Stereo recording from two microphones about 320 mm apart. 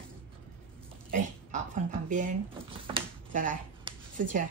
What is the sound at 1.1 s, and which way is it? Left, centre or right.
A woman's voice, right.